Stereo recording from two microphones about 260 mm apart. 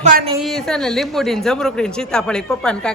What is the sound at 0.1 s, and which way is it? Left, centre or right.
Speech, right.